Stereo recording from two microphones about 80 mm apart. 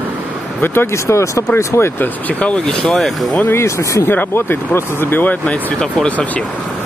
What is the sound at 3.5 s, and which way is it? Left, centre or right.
Speech, left.